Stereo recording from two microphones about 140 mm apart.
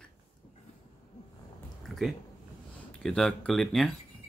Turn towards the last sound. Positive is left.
turn(degrees=5)  # may be behind; listen again after turning